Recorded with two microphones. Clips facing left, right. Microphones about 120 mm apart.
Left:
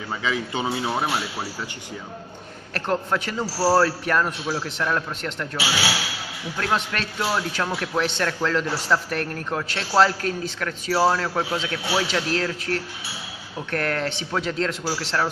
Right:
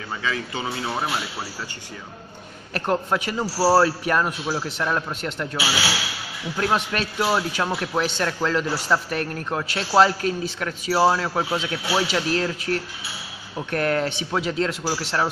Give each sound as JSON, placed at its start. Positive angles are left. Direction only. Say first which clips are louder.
{"t": 0.2, "sound": "speech", "louder": "left 2 dB", "side_deg": 20}
{"t": 2.7, "sound": "a man's voice", "louder": "right 1 dB", "side_deg": -10}
{"t": 6.6, "sound": "a man's voice", "louder": "right 2 dB", "side_deg": -10}